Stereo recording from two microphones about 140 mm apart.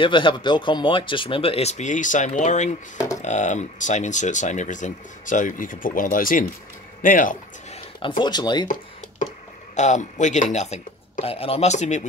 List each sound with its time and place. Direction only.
0.0 s speech: 35° left (ahead or behind); by 7.3 s 75° left (ahead or behind)
8.2 s speech: 30° left (ahead or behind)
9.8 s speech: 60° left (ahead or behind)